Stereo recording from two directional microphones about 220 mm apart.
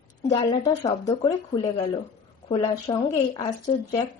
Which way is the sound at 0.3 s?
25° left (ahead or behind).